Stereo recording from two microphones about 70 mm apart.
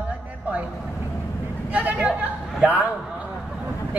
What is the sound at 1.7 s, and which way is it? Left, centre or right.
Vehicle, right.